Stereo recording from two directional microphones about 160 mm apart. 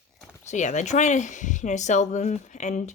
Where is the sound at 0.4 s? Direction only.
50° left (ahead or behind).